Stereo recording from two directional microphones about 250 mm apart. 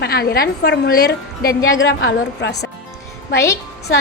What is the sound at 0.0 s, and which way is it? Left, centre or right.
A woman's voice, left.